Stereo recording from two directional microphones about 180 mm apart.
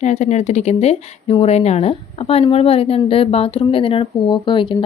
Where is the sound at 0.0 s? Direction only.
40° left (ahead or behind).